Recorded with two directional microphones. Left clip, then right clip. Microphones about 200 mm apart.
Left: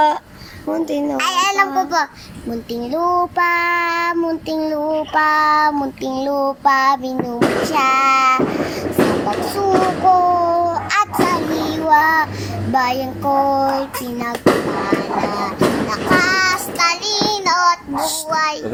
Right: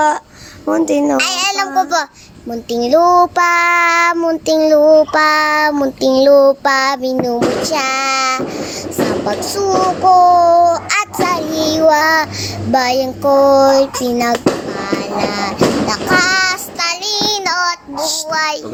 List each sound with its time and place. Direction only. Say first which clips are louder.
0.7 s child singing: right 7 dB; 45° right (ahead or behind)
1.8 s child singing: right 3 dB; 50° right (ahead or behind)
9.6 s a sound: right 2 dB; 50° right (ahead or behind)
12.7 s child singing: right 4 dB; 50° right (ahead or behind)